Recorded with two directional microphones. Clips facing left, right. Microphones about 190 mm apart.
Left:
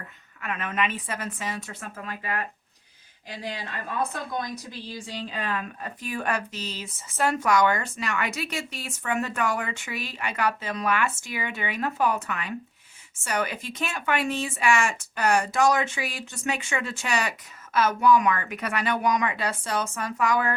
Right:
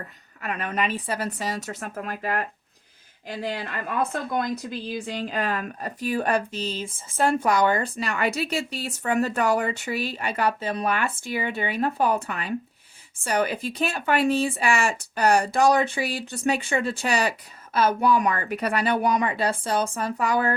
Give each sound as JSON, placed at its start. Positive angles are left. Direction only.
{"t": 0.4, "sound": "speech", "side_deg": -35}
{"t": 4.9, "sound": "speech", "side_deg": -55}